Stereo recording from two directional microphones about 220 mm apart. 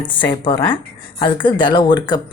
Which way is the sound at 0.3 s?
20° left (ahead or behind).